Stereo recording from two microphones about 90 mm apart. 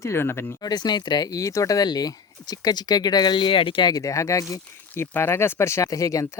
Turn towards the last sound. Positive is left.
turn(degrees=35)  # may be behind; listen again after turning